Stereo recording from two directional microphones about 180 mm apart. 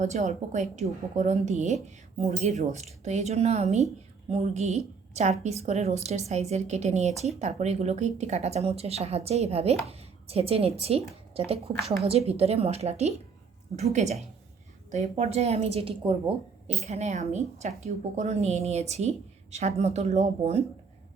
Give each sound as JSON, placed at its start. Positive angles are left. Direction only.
{"t": 0.0, "sound": "a woman's voice", "side_deg": -40}